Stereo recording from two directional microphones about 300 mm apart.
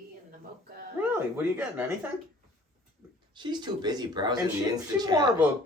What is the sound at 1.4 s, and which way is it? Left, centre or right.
Speech, centre.